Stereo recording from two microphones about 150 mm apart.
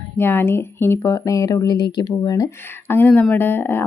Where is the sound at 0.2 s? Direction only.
15° left (ahead or behind).